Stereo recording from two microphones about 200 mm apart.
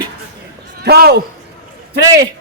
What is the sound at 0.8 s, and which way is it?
Speech, 55° right (ahead or behind).